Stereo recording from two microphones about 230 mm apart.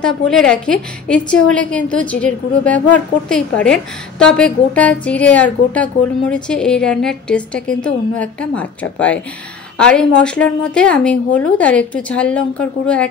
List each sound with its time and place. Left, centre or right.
0.3 s a woman's voice: centre